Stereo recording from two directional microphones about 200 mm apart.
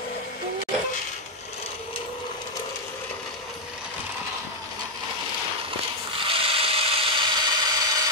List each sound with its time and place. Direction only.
6.2 s tools: 25° right (ahead or behind)